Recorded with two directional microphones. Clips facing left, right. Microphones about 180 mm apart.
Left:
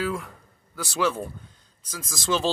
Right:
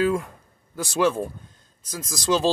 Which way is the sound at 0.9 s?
20° right (ahead or behind).